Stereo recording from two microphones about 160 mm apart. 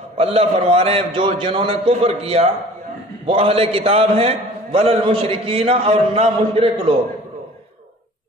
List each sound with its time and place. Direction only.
0.2 s a man's voice: 40° right (ahead or behind)